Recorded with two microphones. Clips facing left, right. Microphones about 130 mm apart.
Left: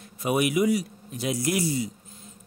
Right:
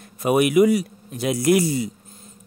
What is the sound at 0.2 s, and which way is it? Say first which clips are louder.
A man's voice: right 7 dB; 60° right (ahead or behind).